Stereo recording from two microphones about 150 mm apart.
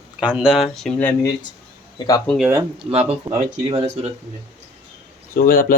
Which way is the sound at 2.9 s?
45° right (ahead or behind).